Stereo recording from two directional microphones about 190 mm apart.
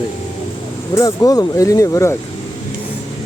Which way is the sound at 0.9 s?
20° left (ahead or behind).